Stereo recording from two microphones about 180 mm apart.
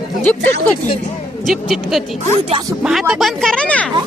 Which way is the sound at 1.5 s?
Centre (ahead or behind).